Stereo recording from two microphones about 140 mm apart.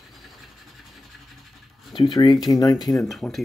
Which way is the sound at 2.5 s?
25° left (ahead or behind).